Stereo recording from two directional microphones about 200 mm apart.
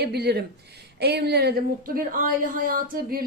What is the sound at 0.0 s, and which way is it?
Speech, 55° right (ahead or behind).